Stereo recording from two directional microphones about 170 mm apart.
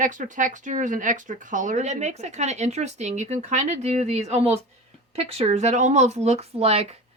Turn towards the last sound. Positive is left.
turn(degrees=-40)  # may be behind; listen again after turning